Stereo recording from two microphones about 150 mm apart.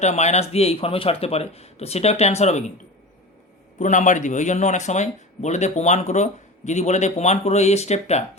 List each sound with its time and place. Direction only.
0.0 s speech: 50° left (ahead or behind)
3.8 s speech: 55° left (ahead or behind)